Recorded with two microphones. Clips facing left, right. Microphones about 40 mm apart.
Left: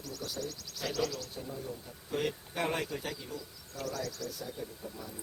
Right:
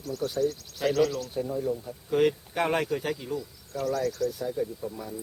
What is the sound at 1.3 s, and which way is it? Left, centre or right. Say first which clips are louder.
Speech: right 12 dB; right.